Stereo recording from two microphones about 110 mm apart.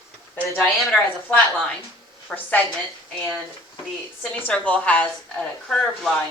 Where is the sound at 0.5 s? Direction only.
Centre (ahead or behind).